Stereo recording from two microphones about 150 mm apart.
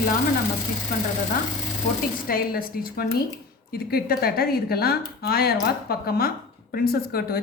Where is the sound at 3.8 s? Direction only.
90° left.